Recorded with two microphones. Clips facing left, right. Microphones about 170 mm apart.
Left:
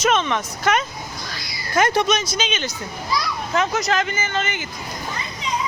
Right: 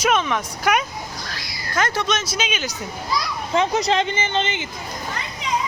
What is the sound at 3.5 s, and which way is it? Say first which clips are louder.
A woman's voice: right 2 dB; 30° right (ahead or behind).